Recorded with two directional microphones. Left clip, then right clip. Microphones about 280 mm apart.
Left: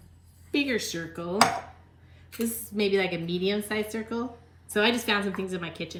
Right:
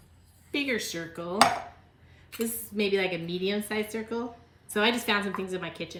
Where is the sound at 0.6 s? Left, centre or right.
Centre.